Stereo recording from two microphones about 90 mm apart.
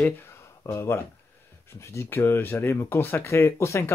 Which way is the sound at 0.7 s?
30° left (ahead or behind).